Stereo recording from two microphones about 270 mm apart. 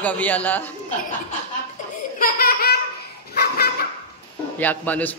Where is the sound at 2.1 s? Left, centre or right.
Left.